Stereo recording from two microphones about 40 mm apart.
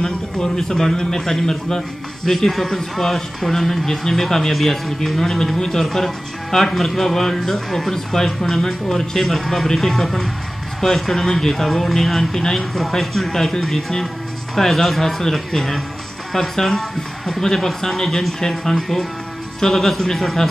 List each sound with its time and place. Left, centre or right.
0.0 s a man's voice: centre